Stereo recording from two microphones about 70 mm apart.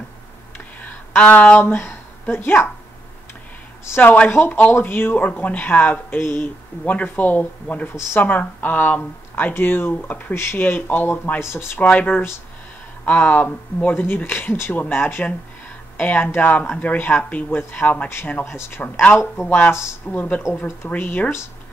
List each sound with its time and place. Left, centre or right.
0.8 s speech: centre
3.8 s speech: left
7.9 s speech: left
8.2 s speech: left
10.3 s speech: left
10.6 s speech: left
11.8 s speech: left
18.4 s speech: left
18.8 s speech: centre